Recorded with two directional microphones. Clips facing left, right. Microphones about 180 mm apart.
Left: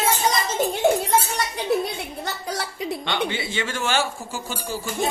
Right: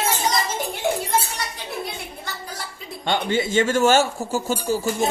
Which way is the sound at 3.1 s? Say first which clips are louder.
Right 8 dB; 45° right (ahead or behind).